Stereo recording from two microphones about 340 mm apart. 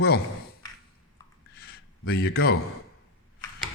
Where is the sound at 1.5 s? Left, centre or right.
Left.